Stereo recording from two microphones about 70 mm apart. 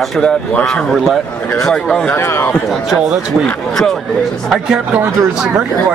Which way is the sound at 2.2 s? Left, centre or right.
Left.